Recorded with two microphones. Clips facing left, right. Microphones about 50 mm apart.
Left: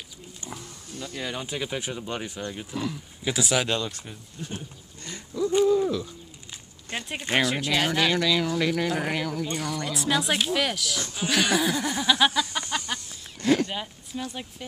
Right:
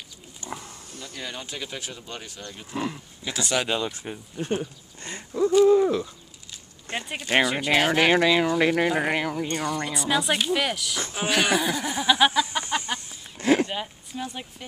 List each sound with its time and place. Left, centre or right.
0.4 s a sound: left
1.0 s speech: centre
2.7 s speech: right
3.3 s speech: centre
3.6 s speech: centre
3.9 s speech: right
4.4 s speech: right
6.9 s speech: centre
7.9 s speech: right
9.9 s speech: centre
12.3 s a sound: right